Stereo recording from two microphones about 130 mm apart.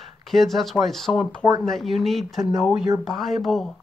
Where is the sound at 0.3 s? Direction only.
Centre (ahead or behind).